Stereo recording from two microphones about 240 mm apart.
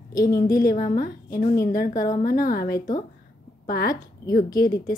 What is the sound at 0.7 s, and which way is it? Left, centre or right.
A woman's voice, left.